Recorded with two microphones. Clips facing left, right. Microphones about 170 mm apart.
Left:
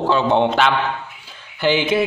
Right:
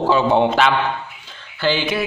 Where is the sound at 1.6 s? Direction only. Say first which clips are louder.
Left 3 dB; 20° left (ahead or behind).